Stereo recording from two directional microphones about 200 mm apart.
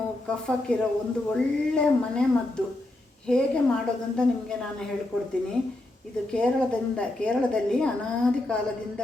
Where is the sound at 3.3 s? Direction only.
5° left (ahead or behind).